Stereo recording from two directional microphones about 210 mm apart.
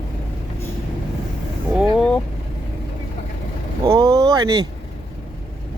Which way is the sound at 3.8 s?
20° right (ahead or behind).